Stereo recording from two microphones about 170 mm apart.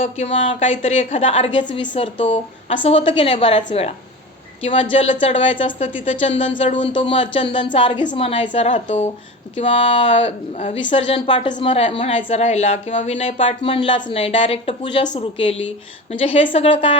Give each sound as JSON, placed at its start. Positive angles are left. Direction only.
{"t": 0.0, "sound": "a woman's voice", "side_deg": 35}
{"t": 10.1, "sound": "a woman's voice", "side_deg": 40}